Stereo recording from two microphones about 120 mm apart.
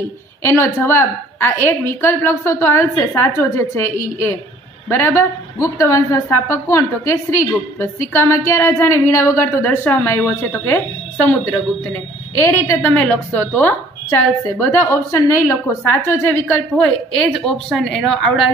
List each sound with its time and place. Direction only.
0.4 s a woman's voice: 20° left (ahead or behind)
12.4 s a woman's voice: 20° left (ahead or behind); by 18.5 s centre (ahead or behind)